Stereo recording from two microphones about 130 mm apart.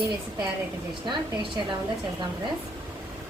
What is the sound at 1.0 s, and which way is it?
Speech, 35° right (ahead or behind).